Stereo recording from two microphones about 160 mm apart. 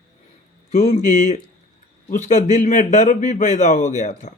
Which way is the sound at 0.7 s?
45° left (ahead or behind).